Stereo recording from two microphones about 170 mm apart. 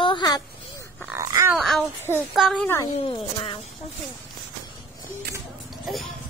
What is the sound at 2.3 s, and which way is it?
Speech, centre (ahead or behind).